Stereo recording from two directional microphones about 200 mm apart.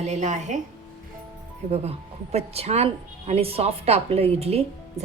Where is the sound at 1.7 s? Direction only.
30° right (ahead or behind).